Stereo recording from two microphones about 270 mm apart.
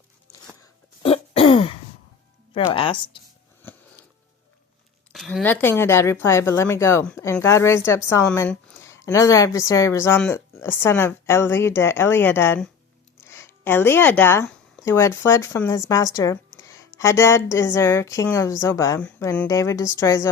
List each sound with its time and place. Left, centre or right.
1.0 s throat clearing: left
2.5 s speech: centre
5.1 s a woman's voice: centre